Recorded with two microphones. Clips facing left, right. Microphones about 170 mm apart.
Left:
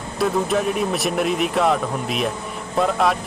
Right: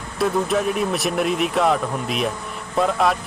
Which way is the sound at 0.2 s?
Centre (ahead or behind).